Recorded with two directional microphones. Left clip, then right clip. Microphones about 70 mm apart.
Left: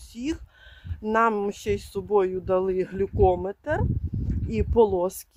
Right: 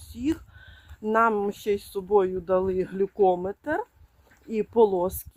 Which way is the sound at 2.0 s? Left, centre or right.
Centre.